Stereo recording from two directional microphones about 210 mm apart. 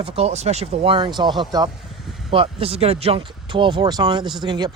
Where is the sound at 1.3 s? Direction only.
Centre (ahead or behind).